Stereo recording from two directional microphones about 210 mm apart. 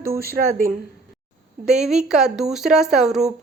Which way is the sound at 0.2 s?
45° right (ahead or behind).